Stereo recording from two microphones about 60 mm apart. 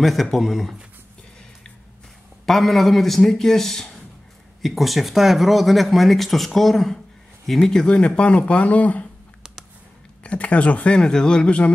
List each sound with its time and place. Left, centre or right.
0.0 s speech: centre
2.4 s speech: centre; by 9.0 s left
10.2 s speech: left
11.0 s speech: centre